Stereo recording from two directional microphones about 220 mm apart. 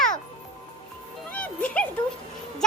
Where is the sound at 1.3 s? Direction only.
5° left (ahead or behind).